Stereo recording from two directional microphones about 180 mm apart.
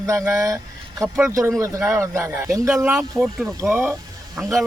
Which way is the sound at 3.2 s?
Centre (ahead or behind).